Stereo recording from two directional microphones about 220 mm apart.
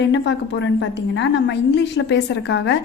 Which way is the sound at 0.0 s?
55° left (ahead or behind).